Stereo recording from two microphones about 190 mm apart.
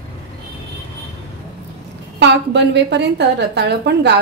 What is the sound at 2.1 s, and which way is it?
A woman's voice, 65° right (ahead or behind).